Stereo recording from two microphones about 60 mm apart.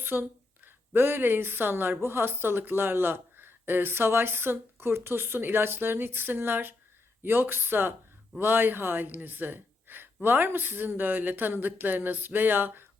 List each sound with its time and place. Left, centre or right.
0.0 s a woman's voice: right